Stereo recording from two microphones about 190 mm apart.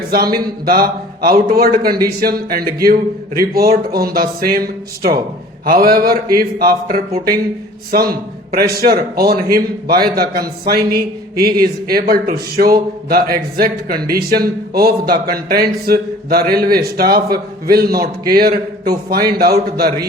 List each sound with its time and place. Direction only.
0.1 s a man's voice: 50° right (ahead or behind)